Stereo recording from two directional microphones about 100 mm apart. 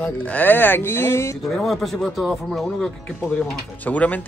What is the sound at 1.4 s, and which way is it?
Speech, centre (ahead or behind).